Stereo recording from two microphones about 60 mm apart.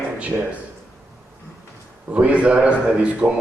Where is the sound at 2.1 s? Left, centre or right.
Right.